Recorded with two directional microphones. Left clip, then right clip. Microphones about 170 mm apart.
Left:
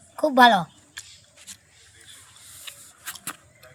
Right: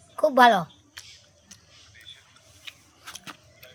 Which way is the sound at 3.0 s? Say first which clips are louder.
Left 4 dB; 60° left (ahead or behind).